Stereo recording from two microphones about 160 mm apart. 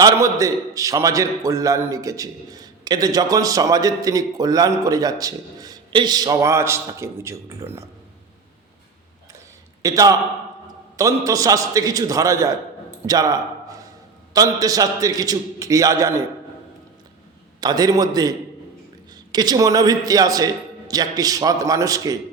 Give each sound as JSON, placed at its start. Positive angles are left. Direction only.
{"t": 0.0, "sound": "a man's voice", "side_deg": -20}
{"t": 9.8, "sound": "a man's voice", "side_deg": -20}
{"t": 17.6, "sound": "a man's voice", "side_deg": -25}